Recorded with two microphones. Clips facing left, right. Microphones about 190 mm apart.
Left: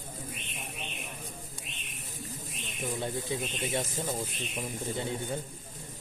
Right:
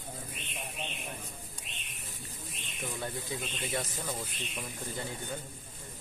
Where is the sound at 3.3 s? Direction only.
25° left (ahead or behind).